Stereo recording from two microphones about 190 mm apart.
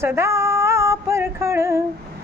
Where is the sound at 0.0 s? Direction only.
15° right (ahead or behind).